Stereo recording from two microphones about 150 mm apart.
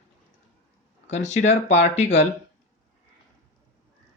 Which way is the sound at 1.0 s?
50° left (ahead or behind).